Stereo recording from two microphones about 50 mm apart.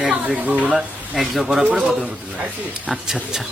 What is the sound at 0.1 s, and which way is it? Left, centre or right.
Speech, right.